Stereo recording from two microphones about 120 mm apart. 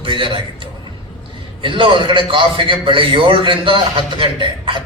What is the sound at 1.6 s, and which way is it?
A man's voice, 45° right (ahead or behind).